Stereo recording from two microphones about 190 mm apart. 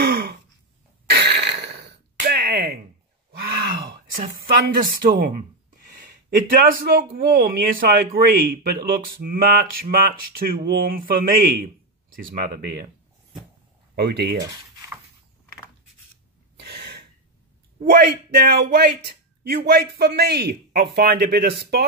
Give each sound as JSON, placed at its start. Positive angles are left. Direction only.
{"t": 0.0, "sound": "a sound", "side_deg": -55}
{"t": 4.7, "sound": "a man's voice", "side_deg": -50}
{"t": 13.9, "sound": "a man's voice", "side_deg": -60}
{"t": 16.5, "sound": "gasp", "side_deg": -60}
{"t": 17.7, "sound": "a man's voice", "side_deg": -55}